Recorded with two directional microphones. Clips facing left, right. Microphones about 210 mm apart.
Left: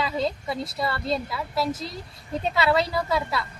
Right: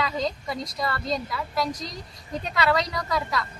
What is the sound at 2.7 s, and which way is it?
Speech, 30° left (ahead or behind).